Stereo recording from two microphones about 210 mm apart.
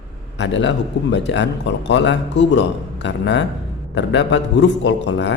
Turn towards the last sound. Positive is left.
turn(degrees=55)  # may be behind; listen again after turning